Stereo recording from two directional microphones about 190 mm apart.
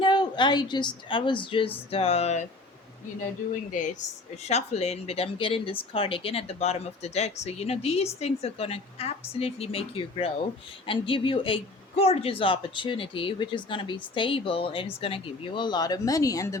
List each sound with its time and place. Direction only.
0.0 s speech: 25° left (ahead or behind)
3.7 s speech: 40° left (ahead or behind); by 16.6 s 15° left (ahead or behind)